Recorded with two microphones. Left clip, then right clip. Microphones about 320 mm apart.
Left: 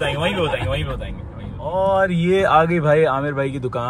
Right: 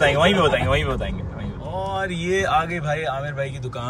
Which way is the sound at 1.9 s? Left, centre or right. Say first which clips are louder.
Left 6 dB; centre.